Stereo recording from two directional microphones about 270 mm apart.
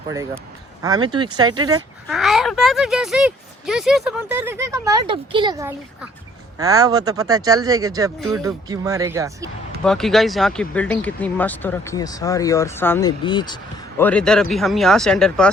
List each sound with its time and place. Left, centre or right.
0.8 s speech: centre
2.0 s speech: centre
9.8 s speech: centre
14.0 s speech: centre